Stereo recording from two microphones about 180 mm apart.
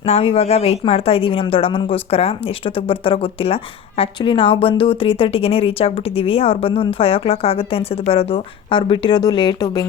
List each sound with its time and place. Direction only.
0.0 s speech: 35° left (ahead or behind)